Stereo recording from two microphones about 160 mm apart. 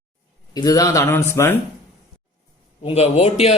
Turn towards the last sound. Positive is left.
turn(degrees=45)  # may be behind; listen again after turning